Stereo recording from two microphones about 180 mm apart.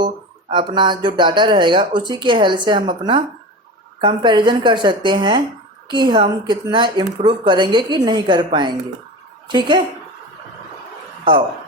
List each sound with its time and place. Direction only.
0.5 s speech: 25° right (ahead or behind)